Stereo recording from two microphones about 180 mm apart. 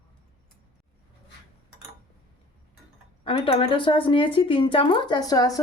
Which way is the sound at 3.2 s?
30° left (ahead or behind).